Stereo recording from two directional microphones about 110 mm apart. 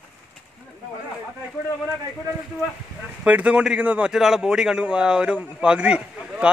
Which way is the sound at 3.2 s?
10° right (ahead or behind).